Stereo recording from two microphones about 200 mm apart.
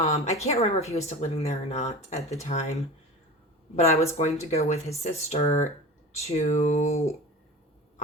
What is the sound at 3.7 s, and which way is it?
Speech, 35° left (ahead or behind).